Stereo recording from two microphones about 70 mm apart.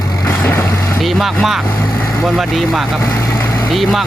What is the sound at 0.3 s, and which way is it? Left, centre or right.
Vehicle, left.